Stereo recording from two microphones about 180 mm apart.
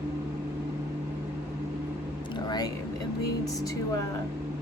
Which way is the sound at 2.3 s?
20° left (ahead or behind).